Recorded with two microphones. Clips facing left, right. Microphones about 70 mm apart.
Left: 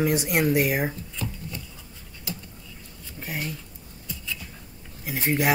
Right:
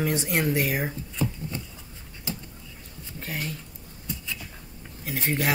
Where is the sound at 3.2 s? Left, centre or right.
Centre.